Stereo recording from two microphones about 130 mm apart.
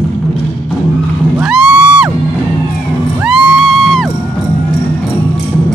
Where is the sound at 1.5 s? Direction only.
5° right (ahead or behind).